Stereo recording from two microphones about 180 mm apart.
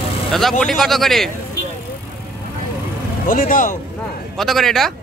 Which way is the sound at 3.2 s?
50° left (ahead or behind).